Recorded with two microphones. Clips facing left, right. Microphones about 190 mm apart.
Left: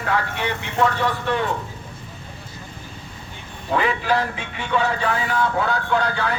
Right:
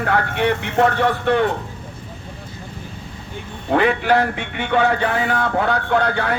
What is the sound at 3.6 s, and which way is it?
Speech, 60° right (ahead or behind).